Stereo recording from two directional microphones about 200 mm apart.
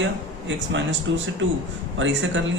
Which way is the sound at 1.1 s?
70° right (ahead or behind).